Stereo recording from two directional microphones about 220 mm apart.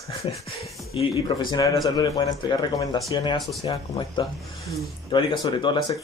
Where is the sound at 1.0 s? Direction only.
20° left (ahead or behind).